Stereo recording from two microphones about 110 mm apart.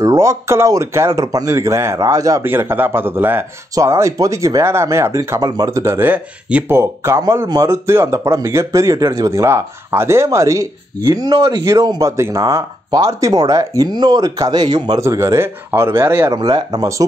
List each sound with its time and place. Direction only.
0.0 s speech: 30° right (ahead or behind)
2.4 s speech: 20° right (ahead or behind)
6.8 s speech: 25° right (ahead or behind)
15.0 s speech: 25° right (ahead or behind)
16.3 s speech: 40° right (ahead or behind)